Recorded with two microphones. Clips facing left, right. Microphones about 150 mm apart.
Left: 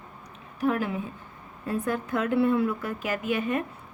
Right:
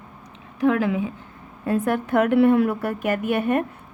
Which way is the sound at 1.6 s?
70° right (ahead or behind).